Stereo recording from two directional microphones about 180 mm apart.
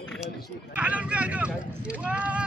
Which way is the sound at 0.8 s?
10° right (ahead or behind).